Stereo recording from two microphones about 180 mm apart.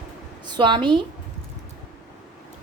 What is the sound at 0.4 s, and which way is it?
Speech, 25° right (ahead or behind).